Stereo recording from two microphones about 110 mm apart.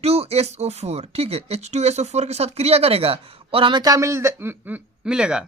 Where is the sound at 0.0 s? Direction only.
70° right (ahead or behind); by 5.5 s 5° right (ahead or behind).